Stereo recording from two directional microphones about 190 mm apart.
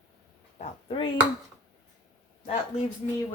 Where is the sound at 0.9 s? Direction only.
25° left (ahead or behind).